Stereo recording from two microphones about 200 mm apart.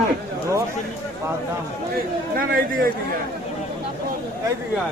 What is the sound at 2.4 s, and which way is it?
Speech, 45° right (ahead or behind).